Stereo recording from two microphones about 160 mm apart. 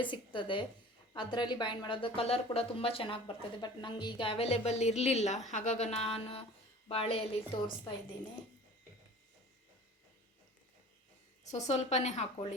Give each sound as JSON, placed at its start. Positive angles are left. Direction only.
{"t": 0.0, "sound": "a woman's voice", "side_deg": 30}
{"t": 11.5, "sound": "a woman's voice", "side_deg": 45}